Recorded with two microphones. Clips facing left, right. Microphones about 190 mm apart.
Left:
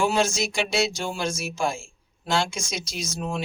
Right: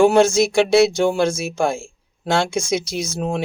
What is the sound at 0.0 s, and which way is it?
Speech, 60° right (ahead or behind).